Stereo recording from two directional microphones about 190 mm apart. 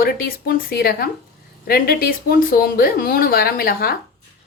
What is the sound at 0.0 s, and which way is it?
A woman's voice, 55° left (ahead or behind).